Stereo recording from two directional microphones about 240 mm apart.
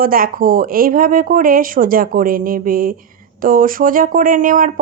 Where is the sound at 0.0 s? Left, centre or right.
Right.